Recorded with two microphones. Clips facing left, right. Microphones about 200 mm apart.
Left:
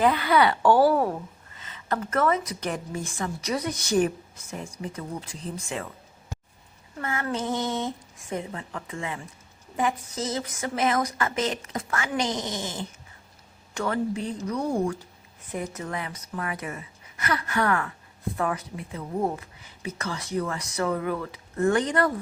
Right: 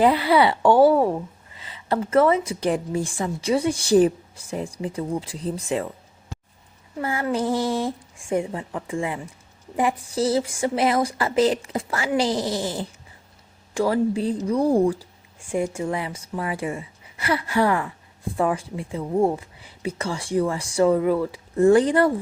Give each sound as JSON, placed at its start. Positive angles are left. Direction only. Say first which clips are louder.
{"t": 0.0, "sound": "speech", "louder": "right 4 dB", "side_deg": -30}
{"t": 2.0, "sound": "speech", "louder": "right 7 dB", "side_deg": -25}
{"t": 7.0, "sound": "speech", "louder": "right 5 dB", "side_deg": -30}
{"t": 17.7, "sound": "speech", "louder": "right 3 dB", "side_deg": -15}
{"t": 18.3, "sound": "speech", "louder": "right 6 dB", "side_deg": -30}